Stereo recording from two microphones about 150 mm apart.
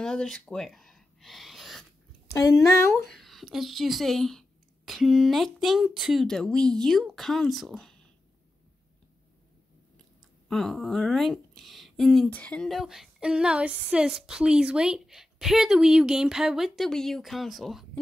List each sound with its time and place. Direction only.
0.0 s gasp: 5° left (ahead or behind)
2.3 s speech: 20° left (ahead or behind)
3.1 s speech: centre (ahead or behind)
10.5 s speech: centre (ahead or behind)